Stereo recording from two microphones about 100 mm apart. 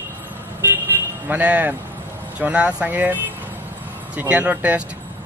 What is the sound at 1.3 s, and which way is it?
Speech, 15° right (ahead or behind).